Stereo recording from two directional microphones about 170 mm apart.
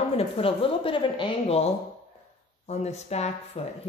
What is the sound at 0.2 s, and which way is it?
Speech, 35° left (ahead or behind).